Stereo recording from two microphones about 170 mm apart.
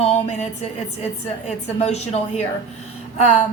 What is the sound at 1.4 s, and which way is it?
Speech, 40° left (ahead or behind).